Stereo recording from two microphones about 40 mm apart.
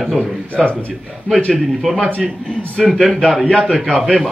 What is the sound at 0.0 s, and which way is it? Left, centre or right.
A man's voice, centre.